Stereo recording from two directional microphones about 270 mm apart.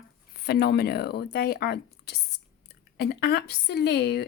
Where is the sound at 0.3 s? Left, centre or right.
Left.